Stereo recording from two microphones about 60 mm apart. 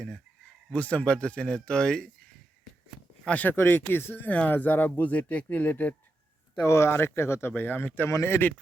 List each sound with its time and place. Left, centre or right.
0.7 s speech: left
3.2 s speech: left
6.6 s speech: left
8.1 s speech: left